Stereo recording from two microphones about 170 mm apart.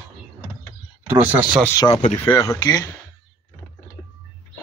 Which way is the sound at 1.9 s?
40° left (ahead or behind).